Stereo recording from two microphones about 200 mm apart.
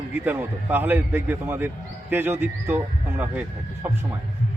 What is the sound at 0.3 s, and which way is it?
A man's voice, 10° right (ahead or behind).